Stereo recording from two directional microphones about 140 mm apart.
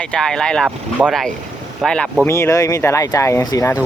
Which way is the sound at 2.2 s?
20° left (ahead or behind).